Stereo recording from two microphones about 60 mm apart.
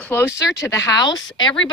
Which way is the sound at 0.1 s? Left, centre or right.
Left.